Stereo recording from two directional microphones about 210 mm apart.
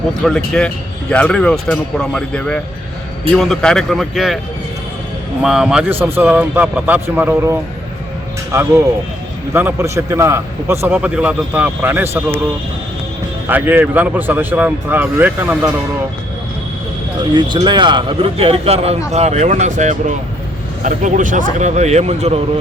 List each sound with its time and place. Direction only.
0.2 s speech: 5° left (ahead or behind)
5.4 s a man's voice: 5° right (ahead or behind)
9.5 s a man's voice: 10° right (ahead or behind)
13.5 s a man's voice: 10° right (ahead or behind)
17.3 s speech: 20° right (ahead or behind)